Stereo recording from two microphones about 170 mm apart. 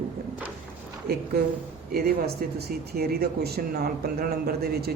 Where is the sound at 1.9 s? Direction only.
65° right (ahead or behind).